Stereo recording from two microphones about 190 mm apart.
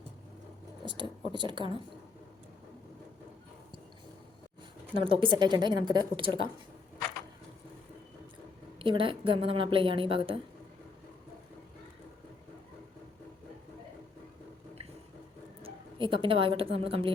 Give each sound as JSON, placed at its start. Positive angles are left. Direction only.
{"t": 0.9, "sound": "a woman's voice", "side_deg": -25}
{"t": 4.9, "sound": "a woman's voice", "side_deg": -30}
{"t": 8.8, "sound": "a woman's voice", "side_deg": -25}
{"t": 15.6, "sound": "speech", "side_deg": -25}